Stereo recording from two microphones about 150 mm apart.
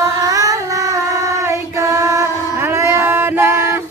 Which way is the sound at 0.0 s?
25° right (ahead or behind).